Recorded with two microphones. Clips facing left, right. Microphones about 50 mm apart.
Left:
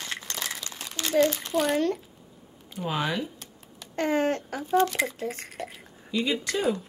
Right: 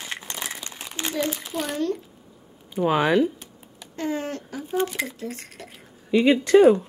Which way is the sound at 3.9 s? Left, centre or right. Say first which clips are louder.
Left 3 dB; left.